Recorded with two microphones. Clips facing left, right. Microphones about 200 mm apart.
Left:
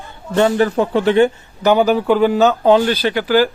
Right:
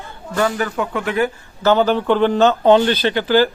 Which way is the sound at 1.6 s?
10° left (ahead or behind).